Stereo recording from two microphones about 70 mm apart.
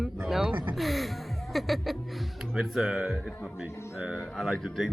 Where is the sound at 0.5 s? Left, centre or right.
Right.